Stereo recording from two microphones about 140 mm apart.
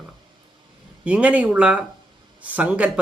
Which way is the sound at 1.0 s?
10° right (ahead or behind).